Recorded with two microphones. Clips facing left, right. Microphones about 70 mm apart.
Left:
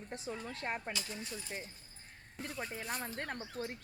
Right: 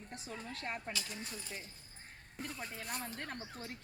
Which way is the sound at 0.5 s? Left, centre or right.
Left.